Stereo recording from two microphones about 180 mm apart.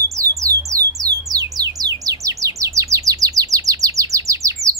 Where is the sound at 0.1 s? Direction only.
15° right (ahead or behind).